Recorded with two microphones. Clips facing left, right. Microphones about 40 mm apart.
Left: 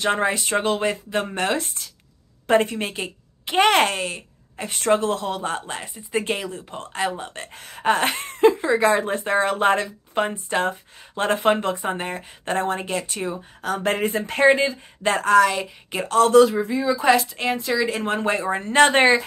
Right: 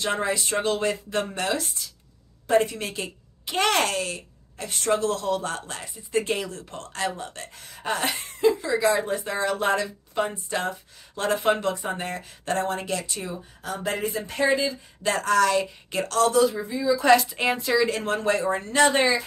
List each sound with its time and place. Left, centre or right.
0.0 s speech: left
1.4 s speech: left
4.6 s speech: left
7.5 s speech: left
13.0 s speech: left
15.1 s speech: left
16.3 s speech: left
17.0 s a woman's voice: centre
18.0 s speech: left
18.8 s speech: left